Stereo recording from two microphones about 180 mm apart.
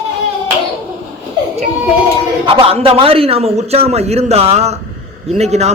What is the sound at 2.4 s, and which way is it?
A man's voice, 30° right (ahead or behind).